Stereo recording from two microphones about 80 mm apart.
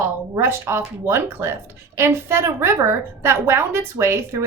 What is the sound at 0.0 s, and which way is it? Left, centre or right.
A woman's voice, right.